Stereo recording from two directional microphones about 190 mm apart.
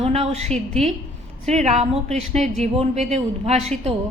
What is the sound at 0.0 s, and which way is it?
Speech, 35° right (ahead or behind).